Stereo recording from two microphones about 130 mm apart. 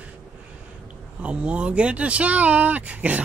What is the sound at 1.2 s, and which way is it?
Speech, 10° right (ahead or behind).